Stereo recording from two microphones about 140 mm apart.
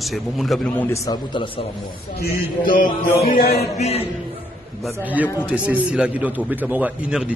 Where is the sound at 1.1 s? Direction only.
35° left (ahead or behind).